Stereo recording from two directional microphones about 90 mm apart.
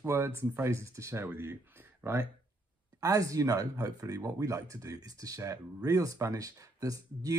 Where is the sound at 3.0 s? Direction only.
40° right (ahead or behind).